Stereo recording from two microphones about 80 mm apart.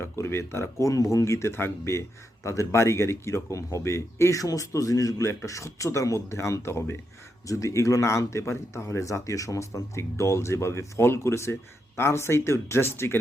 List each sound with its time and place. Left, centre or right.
0.0 s speech: left